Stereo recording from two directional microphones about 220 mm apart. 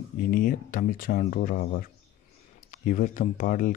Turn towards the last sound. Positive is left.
turn(degrees=35)  # may be behind; listen again after turning